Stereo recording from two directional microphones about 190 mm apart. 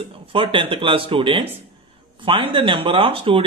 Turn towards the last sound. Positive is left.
turn(degrees=-30)  # may be behind; listen again after turning